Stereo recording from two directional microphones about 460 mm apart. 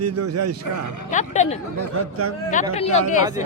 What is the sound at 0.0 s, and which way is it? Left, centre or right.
Speech, right.